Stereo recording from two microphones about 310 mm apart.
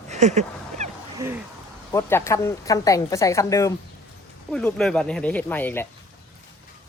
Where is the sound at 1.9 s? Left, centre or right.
Centre.